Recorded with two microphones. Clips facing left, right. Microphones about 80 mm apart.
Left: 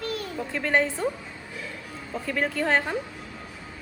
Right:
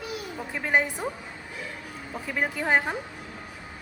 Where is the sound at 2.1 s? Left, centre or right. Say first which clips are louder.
Left 2 dB; centre.